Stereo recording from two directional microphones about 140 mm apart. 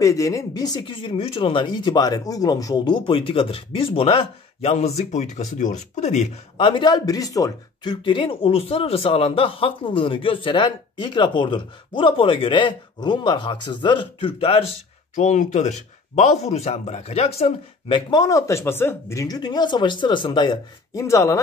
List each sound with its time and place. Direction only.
0.0 s speech: 25° left (ahead or behind); by 14.6 s 40° left (ahead or behind)
15.1 s speech: 60° left (ahead or behind); by 20.5 s 35° left (ahead or behind)
20.9 s speech: 20° left (ahead or behind)